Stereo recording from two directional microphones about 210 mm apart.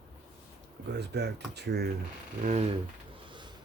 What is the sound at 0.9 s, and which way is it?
Speech, 50° right (ahead or behind).